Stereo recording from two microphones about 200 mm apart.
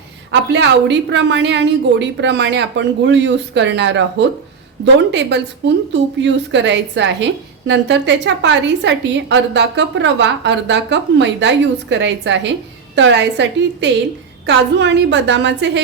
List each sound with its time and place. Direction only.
0.3 s a woman's voice: 60° right (ahead or behind)